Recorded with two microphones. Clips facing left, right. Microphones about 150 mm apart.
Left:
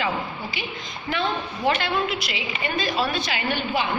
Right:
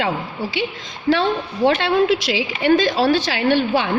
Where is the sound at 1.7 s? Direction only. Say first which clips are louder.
Right 8 dB; 90° right.